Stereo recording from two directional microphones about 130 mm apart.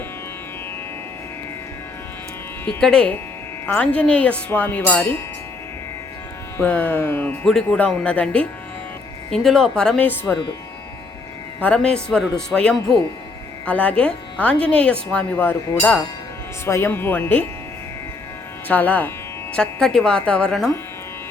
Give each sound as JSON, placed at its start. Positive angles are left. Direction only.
{"t": 2.6, "sound": "speech", "side_deg": 5}
{"t": 6.6, "sound": "speech", "side_deg": 10}
{"t": 11.6, "sound": "speech", "side_deg": 5}
{"t": 18.7, "sound": "speech", "side_deg": 10}